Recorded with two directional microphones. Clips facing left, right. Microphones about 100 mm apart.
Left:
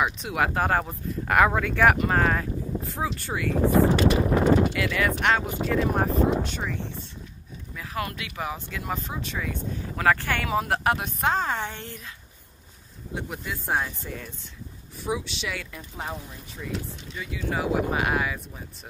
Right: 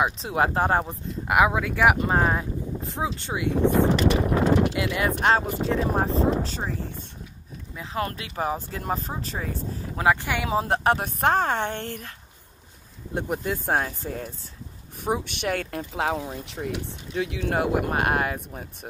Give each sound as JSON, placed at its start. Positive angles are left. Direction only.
{"t": 0.0, "sound": "speech", "side_deg": -30}
{"t": 1.2, "sound": "speech", "side_deg": -10}
{"t": 2.0, "sound": "speech", "side_deg": -20}
{"t": 4.7, "sound": "speech", "side_deg": -25}
{"t": 8.1, "sound": "speech", "side_deg": -40}
{"t": 9.9, "sound": "speech", "side_deg": -15}
{"t": 10.5, "sound": "speech", "side_deg": -25}
{"t": 11.1, "sound": "speech", "side_deg": -50}
{"t": 13.1, "sound": "speech", "side_deg": -50}
{"t": 15.0, "sound": "speech", "side_deg": -55}
{"t": 16.4, "sound": "speech", "side_deg": -70}